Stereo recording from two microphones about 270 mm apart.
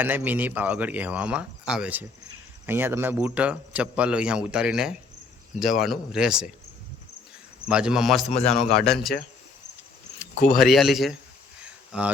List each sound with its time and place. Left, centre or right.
0.0 s a man's voice: centre
7.7 s a man's voice: centre
8.3 s a man's voice: left
8.5 s a man's voice: centre
10.6 s a man's voice: centre
11.6 s a sound: centre